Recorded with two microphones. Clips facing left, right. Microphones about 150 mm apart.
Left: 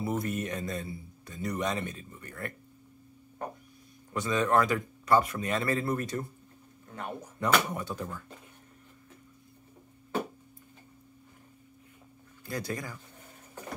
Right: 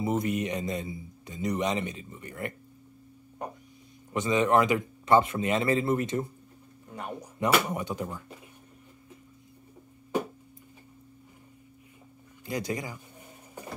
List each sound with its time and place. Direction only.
0.0 s a man's voice: 20° right (ahead or behind)
4.1 s a man's voice: 20° right (ahead or behind)
12.4 s speech: 15° right (ahead or behind)